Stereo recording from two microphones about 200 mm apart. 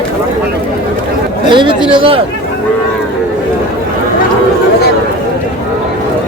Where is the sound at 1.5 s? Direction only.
25° right (ahead or behind).